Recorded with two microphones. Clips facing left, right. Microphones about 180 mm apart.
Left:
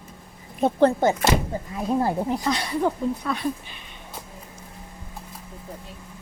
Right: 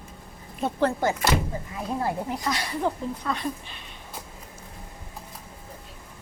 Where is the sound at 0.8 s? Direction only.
25° left (ahead or behind).